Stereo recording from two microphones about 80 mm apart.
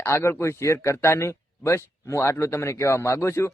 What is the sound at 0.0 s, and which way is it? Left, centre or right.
Speech, left.